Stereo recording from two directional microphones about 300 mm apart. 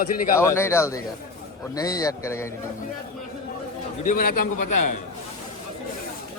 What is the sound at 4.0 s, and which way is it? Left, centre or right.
Speech, left.